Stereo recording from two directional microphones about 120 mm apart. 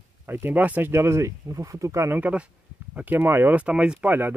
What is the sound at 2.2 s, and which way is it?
Speech, 15° right (ahead or behind).